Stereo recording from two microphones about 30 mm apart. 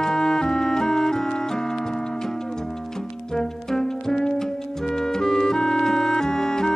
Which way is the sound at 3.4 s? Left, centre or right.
Centre.